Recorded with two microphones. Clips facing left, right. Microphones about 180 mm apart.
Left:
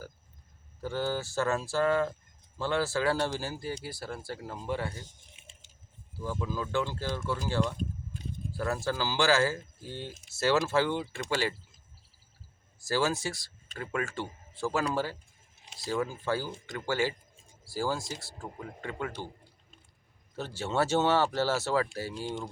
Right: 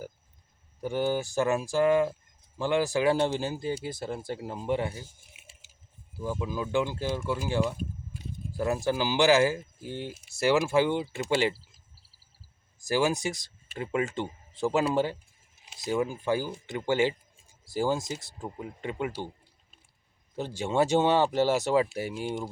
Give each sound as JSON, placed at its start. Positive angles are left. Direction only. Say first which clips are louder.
{"t": 0.8, "sound": "speech", "louder": "right 4 dB", "side_deg": -15}
{"t": 5.0, "sound": "a sound", "louder": "even", "side_deg": -10}
{"t": 6.1, "sound": "speech", "louder": "right 2 dB", "side_deg": -15}
{"t": 12.8, "sound": "speech", "louder": "right 3 dB", "side_deg": -15}
{"t": 20.3, "sound": "speech", "louder": "right 3 dB", "side_deg": -15}